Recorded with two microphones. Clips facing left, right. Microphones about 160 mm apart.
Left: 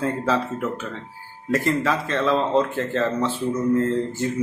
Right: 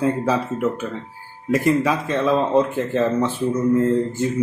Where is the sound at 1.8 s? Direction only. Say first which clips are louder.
Right 2 dB; 15° right (ahead or behind).